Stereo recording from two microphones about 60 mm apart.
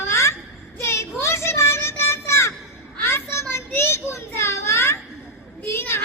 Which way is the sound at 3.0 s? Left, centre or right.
Left.